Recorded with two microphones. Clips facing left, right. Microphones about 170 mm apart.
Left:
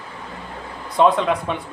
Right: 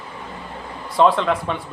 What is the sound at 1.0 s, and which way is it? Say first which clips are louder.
Speech: even; 10° left (ahead or behind).